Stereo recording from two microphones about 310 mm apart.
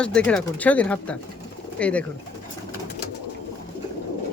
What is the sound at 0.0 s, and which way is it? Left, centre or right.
Speech, centre.